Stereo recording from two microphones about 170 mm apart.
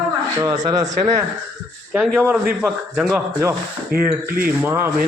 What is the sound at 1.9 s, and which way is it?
A man's voice, 10° right (ahead or behind).